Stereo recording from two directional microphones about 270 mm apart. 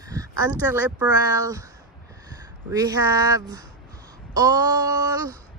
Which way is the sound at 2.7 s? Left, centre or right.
Centre.